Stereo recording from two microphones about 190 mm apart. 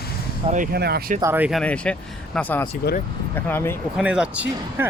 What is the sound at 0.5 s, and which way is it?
Speech, 50° right (ahead or behind).